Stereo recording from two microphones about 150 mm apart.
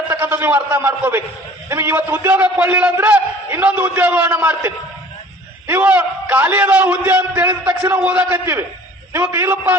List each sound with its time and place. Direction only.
0.1 s a man's voice: 15° right (ahead or behind)